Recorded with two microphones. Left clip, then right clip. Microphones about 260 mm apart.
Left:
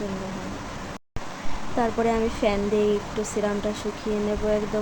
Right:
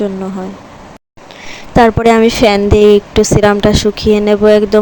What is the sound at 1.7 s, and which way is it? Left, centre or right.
Speech, right.